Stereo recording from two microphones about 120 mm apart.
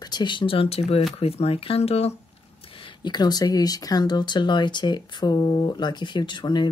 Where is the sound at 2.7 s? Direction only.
40° left (ahead or behind).